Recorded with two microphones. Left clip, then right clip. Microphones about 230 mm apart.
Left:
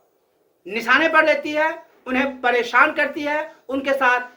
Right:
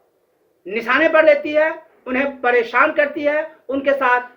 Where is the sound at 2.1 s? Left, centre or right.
Centre.